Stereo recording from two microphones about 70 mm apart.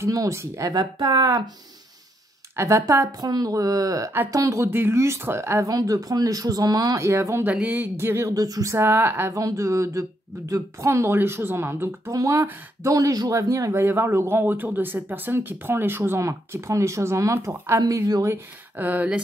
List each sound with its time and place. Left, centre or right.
0.0 s speech: right
0.7 s speech: right
2.5 s speech: right
3.1 s speech: right
5.7 s speech: right
7.0 s speech: right
8.4 s speech: right
8.8 s speech: right
9.3 s speech: right
12.1 s speech: right
13.7 s speech: right
16.2 s speech: right
18.8 s speech: right